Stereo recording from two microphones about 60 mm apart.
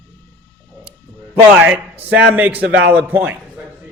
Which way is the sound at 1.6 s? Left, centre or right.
Right.